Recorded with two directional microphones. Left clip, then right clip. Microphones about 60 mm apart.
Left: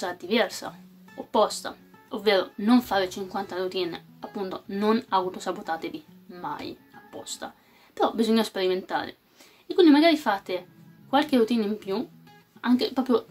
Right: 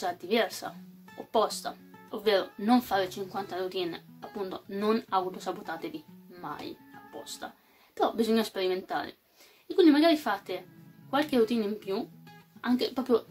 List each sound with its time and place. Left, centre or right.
0.0 s speech: left
7.9 s speech: left